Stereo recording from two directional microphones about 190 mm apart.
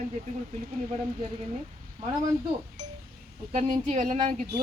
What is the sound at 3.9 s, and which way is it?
Speech, 40° right (ahead or behind).